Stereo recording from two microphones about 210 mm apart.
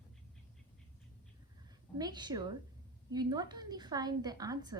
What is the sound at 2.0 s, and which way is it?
A woman's voice, 20° right (ahead or behind).